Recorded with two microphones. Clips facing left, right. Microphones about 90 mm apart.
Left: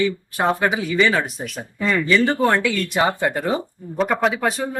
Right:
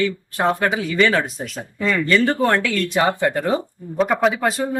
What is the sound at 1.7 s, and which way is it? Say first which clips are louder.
Speech: even; 25° left (ahead or behind).